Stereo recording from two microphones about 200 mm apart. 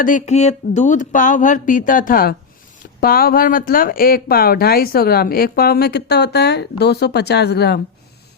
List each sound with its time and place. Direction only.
0.0 s speech: 40° left (ahead or behind); by 7.8 s 55° left (ahead or behind)